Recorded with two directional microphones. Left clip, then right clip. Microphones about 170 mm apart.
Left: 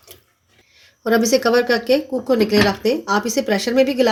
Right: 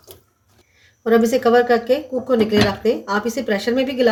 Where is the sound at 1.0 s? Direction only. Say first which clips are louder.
Right 1 dB; 45° left (ahead or behind).